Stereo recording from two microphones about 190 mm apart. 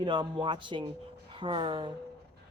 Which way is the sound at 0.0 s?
25° right (ahead or behind).